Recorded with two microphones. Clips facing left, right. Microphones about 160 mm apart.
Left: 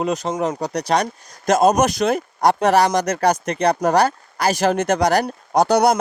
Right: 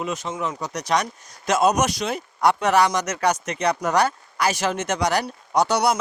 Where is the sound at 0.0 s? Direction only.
40° left (ahead or behind).